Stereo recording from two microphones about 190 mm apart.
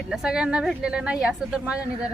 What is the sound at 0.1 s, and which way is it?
Speech, 5° right (ahead or behind).